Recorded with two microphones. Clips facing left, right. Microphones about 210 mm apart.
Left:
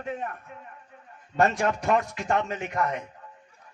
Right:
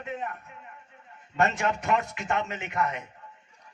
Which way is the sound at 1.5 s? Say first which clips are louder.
Left 3 dB; 35° left (ahead or behind).